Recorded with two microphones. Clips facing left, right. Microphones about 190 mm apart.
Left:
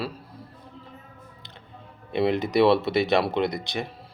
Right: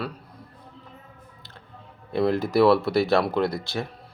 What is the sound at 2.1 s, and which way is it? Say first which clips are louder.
Speech: right 1 dB; 20° left (ahead or behind).